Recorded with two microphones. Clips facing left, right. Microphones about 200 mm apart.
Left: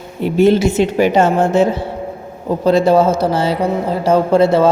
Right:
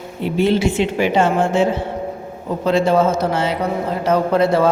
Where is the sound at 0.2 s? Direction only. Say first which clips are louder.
Left 5 dB; 45° left (ahead or behind); by 4.7 s 25° left (ahead or behind).